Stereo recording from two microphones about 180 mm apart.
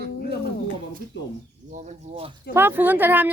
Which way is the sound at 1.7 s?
40° right (ahead or behind).